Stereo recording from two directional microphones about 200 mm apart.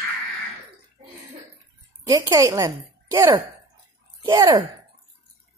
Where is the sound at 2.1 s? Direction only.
15° right (ahead or behind).